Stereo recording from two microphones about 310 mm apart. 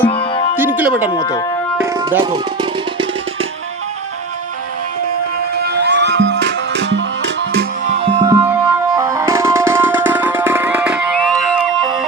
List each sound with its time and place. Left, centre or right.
0.1 s music: centre
0.8 s speech: centre
1.1 s speech: centre
1.8 s tabla: centre
5.5 s music: right
7.5 s music: right; by 11.9 s centre